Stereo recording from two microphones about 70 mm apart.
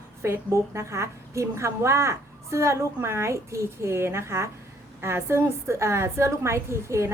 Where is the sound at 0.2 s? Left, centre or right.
Right.